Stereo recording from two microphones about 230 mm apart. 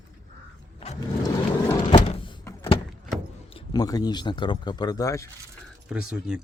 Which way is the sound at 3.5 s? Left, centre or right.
Centre.